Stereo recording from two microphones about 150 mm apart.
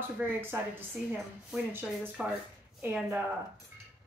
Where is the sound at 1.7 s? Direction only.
5° right (ahead or behind).